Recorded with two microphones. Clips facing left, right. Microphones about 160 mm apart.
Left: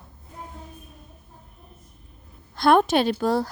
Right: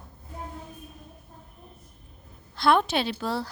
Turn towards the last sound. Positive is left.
turn(degrees=45)  # may be behind; listen again after turning